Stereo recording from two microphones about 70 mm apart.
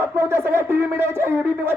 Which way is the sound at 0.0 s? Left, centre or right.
Right.